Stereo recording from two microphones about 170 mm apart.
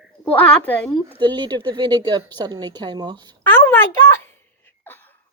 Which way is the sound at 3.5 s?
15° left (ahead or behind).